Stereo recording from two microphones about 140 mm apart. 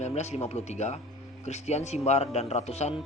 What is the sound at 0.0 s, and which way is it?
A man's voice, 55° left (ahead or behind).